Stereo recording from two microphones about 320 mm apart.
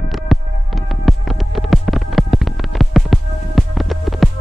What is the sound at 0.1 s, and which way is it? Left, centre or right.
Music, centre.